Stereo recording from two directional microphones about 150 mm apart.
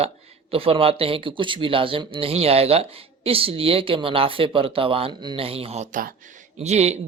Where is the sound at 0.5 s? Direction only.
40° right (ahead or behind).